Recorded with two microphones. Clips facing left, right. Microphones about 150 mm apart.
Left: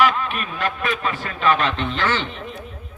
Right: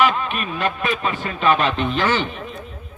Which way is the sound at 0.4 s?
20° right (ahead or behind).